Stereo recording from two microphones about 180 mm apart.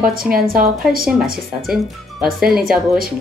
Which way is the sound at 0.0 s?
55° right (ahead or behind).